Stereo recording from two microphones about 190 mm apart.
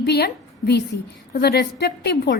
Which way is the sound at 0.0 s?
60° left (ahead or behind).